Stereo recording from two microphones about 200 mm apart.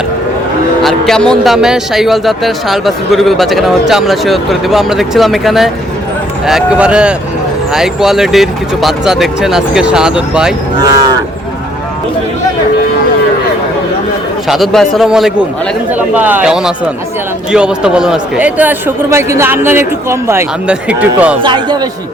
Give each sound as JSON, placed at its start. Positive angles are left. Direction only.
{"t": 0.8, "sound": "speech", "side_deg": 0}
{"t": 14.4, "sound": "a man's voice", "side_deg": 0}
{"t": 21.4, "sound": "speech", "side_deg": -20}